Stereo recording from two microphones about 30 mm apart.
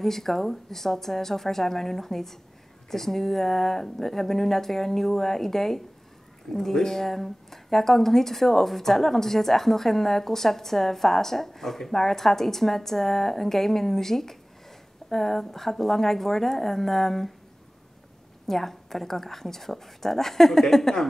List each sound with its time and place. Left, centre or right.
0.0 s speech: centre
18.5 s speech: centre